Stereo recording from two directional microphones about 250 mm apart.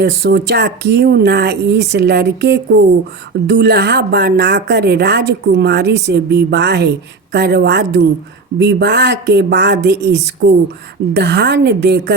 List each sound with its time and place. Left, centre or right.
0.0 s a woman's voice: right